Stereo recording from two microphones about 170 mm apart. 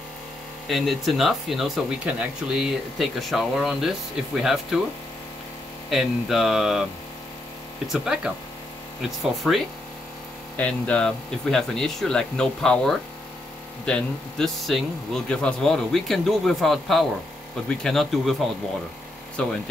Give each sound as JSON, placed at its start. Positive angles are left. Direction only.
{"t": 0.7, "sound": "speech", "side_deg": 0}
{"t": 5.9, "sound": "speech", "side_deg": 0}
{"t": 7.9, "sound": "speech", "side_deg": -5}